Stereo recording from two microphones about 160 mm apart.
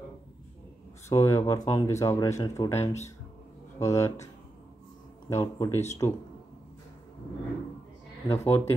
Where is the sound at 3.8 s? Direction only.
20° left (ahead or behind).